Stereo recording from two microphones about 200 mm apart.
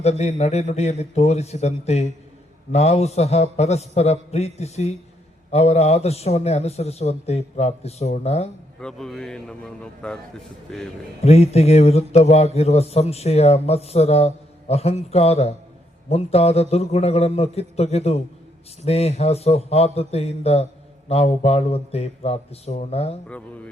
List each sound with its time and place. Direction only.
0.0 s a man's voice: 30° left (ahead or behind)
8.8 s speech: centre (ahead or behind)
11.2 s a man's voice: 30° left (ahead or behind)